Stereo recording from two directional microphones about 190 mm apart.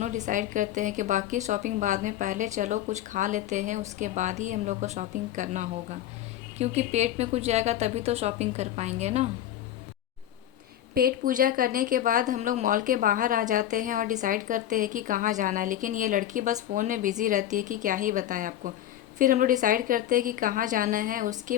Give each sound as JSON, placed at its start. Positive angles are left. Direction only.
{"t": 0.0, "sound": "a woman's voice", "side_deg": -40}
{"t": 10.9, "sound": "speech", "side_deg": -50}